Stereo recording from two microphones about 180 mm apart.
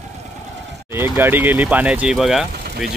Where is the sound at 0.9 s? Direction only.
10° right (ahead or behind).